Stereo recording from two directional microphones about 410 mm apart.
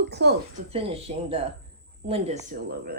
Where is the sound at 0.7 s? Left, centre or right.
Centre.